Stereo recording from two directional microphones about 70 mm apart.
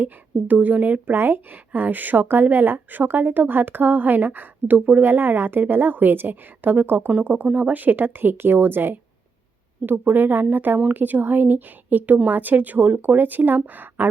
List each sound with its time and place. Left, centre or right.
0.0 s a woman's voice: right